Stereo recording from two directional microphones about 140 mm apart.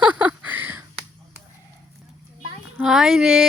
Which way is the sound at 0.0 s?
10° right (ahead or behind).